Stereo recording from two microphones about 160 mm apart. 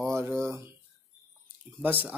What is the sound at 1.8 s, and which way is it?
Speech, 10° right (ahead or behind).